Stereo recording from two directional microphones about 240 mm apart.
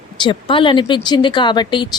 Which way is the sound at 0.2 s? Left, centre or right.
Centre.